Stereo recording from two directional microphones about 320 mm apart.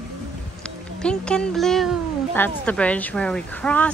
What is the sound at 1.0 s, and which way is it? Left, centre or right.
Speech, centre.